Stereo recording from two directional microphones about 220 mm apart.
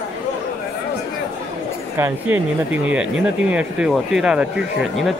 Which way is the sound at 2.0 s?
10° right (ahead or behind).